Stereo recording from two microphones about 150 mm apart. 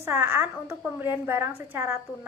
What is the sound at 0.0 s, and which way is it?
A woman's voice, 15° right (ahead or behind).